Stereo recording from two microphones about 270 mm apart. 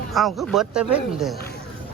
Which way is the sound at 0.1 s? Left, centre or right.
Centre.